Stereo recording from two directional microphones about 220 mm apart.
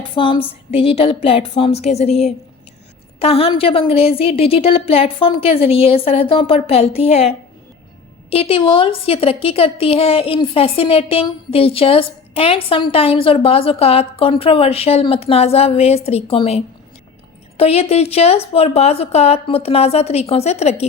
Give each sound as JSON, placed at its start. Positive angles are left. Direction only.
{"t": 0.1, "sound": "a woman's voice", "side_deg": 25}